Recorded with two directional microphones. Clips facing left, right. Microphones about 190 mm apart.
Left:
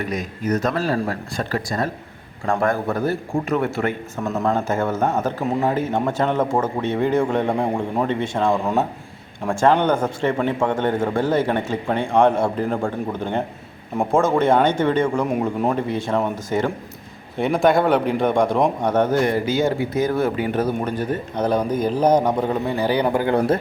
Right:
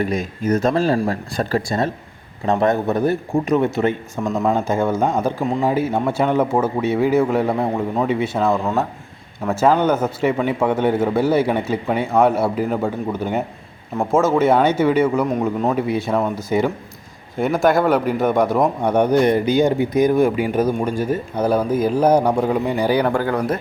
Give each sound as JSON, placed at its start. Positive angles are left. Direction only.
{"t": 0.0, "sound": "a man's voice", "side_deg": -30}
{"t": 15.3, "sound": "a man's voice", "side_deg": 10}
{"t": 15.7, "sound": "a man's voice", "side_deg": -10}
{"t": 23.1, "sound": "speech", "side_deg": 25}